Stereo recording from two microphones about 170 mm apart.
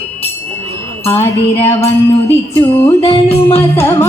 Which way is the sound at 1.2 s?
40° left (ahead or behind).